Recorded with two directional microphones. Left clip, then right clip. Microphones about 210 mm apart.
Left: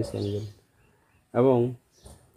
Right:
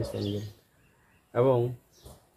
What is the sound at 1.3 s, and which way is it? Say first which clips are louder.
Speech: left 3 dB; 45° left (ahead or behind).